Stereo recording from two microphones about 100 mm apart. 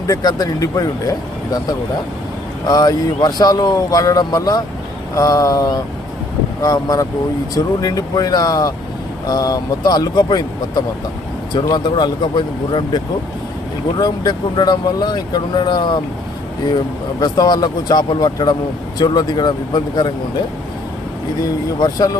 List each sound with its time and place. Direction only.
0.1 s speech: 40° left (ahead or behind)
2.6 s speech: 40° left (ahead or behind)
14.0 s speech: 45° left (ahead or behind)
21.8 s speech: 40° left (ahead or behind)